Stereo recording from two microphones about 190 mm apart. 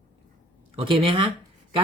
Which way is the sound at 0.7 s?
30° right (ahead or behind).